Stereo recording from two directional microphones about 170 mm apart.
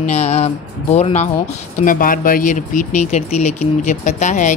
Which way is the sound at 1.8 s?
55° left (ahead or behind).